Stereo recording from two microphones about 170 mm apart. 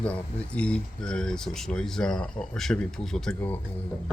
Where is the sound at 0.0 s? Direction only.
5° left (ahead or behind).